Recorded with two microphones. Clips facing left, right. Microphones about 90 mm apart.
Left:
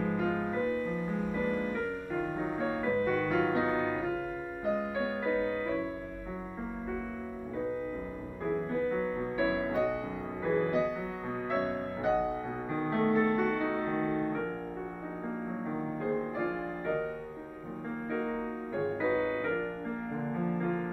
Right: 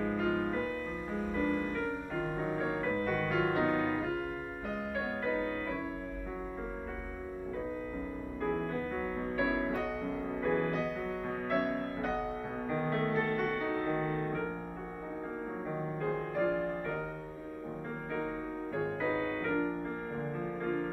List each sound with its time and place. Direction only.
0.2 s music: 15° left (ahead or behind)
2.4 s music: 5° left (ahead or behind)
3.3 s music: 15° left (ahead or behind)
8.9 s music: 15° left (ahead or behind)
11.2 s music: 5° left (ahead or behind)
12.7 s music: 15° left (ahead or behind)
16.4 s music: 10° left (ahead or behind)
18.9 s music: 20° left (ahead or behind)
20.2 s music: 5° left (ahead or behind)